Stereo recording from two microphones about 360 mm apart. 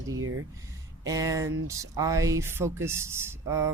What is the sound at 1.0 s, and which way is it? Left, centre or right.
Speech, centre.